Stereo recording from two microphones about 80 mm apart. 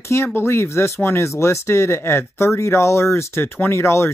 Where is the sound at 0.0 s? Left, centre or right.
Left.